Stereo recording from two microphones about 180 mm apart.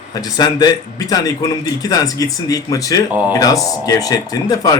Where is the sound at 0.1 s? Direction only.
20° left (ahead or behind).